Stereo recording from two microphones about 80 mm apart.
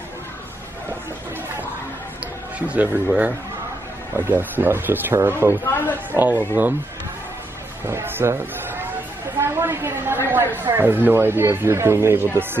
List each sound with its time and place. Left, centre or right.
2.7 s speech: centre
5.7 s a woman's voice: left
6.1 s speech: right
7.8 s speech: right